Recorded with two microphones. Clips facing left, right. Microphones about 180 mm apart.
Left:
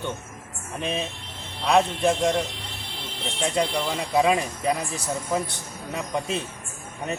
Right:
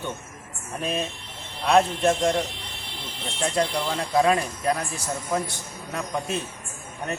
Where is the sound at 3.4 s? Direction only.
Centre (ahead or behind).